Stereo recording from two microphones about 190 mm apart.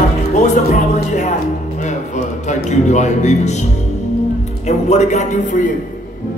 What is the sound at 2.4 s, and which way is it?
Speech, 40° left (ahead or behind).